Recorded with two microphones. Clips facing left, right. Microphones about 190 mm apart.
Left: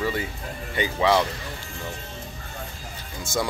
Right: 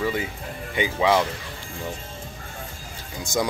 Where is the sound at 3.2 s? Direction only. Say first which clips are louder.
Right 2 dB; 15° right (ahead or behind).